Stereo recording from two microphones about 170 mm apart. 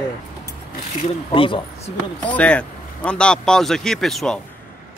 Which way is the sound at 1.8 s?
10° left (ahead or behind).